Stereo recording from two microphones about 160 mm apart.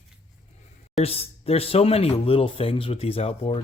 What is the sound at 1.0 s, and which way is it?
Speech, 40° left (ahead or behind).